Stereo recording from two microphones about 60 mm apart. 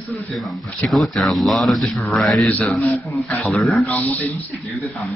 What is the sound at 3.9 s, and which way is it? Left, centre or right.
Speech, left.